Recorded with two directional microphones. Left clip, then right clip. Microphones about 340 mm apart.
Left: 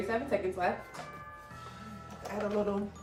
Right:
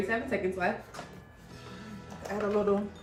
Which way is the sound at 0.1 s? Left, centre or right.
Centre.